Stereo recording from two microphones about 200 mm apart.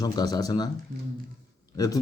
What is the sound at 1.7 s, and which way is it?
Speech, 15° left (ahead or behind).